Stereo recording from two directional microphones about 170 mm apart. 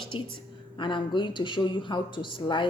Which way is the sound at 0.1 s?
30° left (ahead or behind).